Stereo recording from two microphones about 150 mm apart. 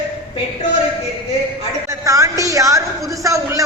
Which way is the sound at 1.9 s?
20° right (ahead or behind).